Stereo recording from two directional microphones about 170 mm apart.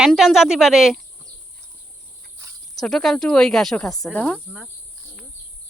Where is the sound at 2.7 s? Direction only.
Centre (ahead or behind).